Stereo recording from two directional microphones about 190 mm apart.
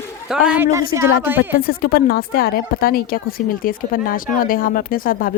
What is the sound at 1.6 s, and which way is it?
Speech, 50° left (ahead or behind).